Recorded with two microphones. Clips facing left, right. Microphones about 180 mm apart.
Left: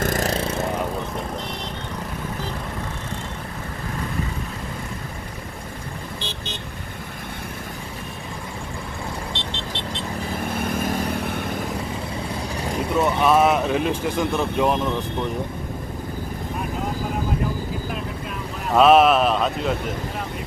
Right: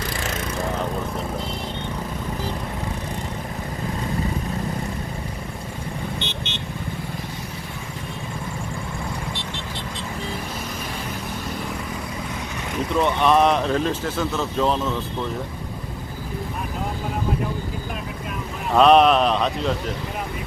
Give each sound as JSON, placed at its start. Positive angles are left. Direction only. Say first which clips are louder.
{"t": 0.0, "sound": "vehicle", "louder": "left 6 dB", "side_deg": 45}
{"t": 6.1, "sound": "vehicle", "louder": "right 2 dB", "side_deg": 35}
{"t": 10.5, "sound": "vehicle", "louder": "left 7 dB", "side_deg": 55}
{"t": 12.9, "sound": "speech", "louder": "even", "side_deg": 5}
{"t": 18.7, "sound": "speech", "louder": "even", "side_deg": 5}